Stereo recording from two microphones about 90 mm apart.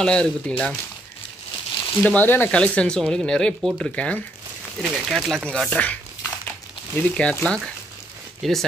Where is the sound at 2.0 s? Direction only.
20° left (ahead or behind).